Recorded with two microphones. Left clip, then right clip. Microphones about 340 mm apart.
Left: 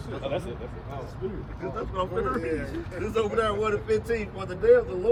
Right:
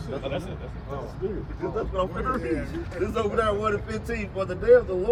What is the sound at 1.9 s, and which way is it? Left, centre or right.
Speech, centre.